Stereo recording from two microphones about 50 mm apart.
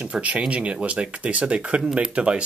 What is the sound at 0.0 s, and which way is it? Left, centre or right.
Speech, right.